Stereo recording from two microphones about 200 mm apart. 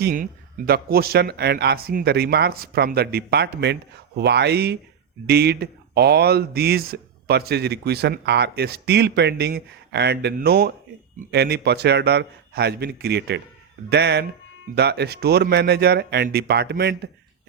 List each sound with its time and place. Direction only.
0.0 s a man's voice: 45° right (ahead or behind)